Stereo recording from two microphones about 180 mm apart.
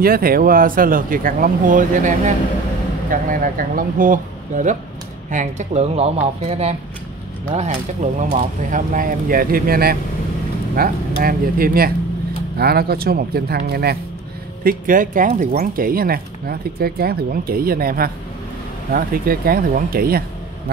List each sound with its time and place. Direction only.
0.0 s speech: 55° right (ahead or behind)